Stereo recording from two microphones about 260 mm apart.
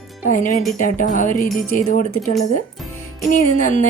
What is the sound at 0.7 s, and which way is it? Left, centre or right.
Speech, left.